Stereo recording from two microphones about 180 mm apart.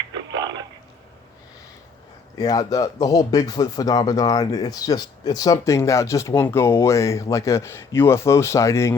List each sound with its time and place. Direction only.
2.4 s speech: 20° left (ahead or behind)